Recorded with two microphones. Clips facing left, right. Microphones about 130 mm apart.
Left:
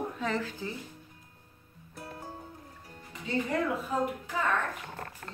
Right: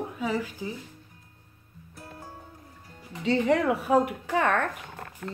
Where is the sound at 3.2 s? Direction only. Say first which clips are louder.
Right 7 dB; 90° right.